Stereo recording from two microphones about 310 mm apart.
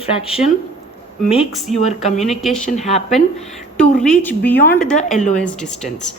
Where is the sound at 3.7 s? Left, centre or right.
Centre.